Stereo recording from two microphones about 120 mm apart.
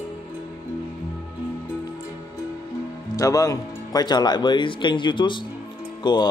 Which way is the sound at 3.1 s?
30° left (ahead or behind).